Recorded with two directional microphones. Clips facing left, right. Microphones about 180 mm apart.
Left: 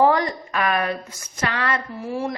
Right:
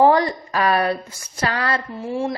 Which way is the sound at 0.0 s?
30° right (ahead or behind).